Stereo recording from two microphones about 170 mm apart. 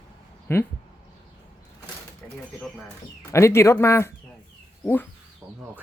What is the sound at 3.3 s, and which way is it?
Speech, 15° left (ahead or behind).